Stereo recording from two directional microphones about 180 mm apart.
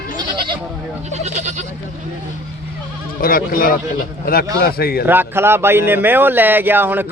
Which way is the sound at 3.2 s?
55° left (ahead or behind).